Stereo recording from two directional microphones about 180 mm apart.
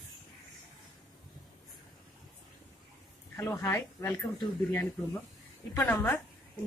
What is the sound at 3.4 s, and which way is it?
Speech, 15° left (ahead or behind).